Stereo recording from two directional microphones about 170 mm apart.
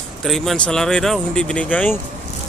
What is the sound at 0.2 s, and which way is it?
Speech, centre (ahead or behind).